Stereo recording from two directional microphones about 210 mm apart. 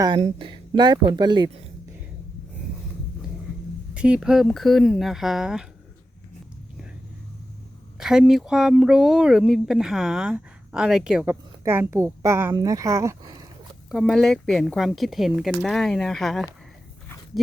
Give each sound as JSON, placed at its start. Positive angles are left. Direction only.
{"t": 0.2, "sound": "speech", "side_deg": -25}
{"t": 3.9, "sound": "speech", "side_deg": -5}
{"t": 7.9, "sound": "speech", "side_deg": -5}
{"t": 13.9, "sound": "speech", "side_deg": 0}